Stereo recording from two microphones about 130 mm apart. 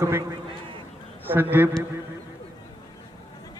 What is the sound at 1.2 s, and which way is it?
Speech, 15° right (ahead or behind).